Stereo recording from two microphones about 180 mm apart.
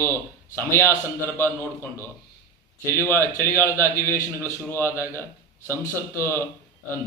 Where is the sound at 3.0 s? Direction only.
15° left (ahead or behind).